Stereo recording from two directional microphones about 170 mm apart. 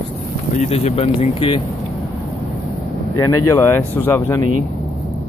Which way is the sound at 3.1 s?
15° left (ahead or behind).